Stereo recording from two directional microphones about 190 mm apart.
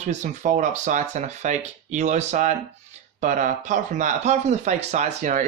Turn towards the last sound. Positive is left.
turn(degrees=-40)  # may be behind; listen again after turning